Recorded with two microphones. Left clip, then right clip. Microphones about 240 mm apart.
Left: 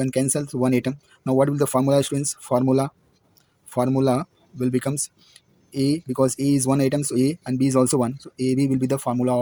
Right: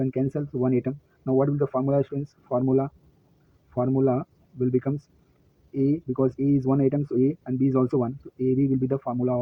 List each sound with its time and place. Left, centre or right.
0.0 s speech: left
6.3 s speech: left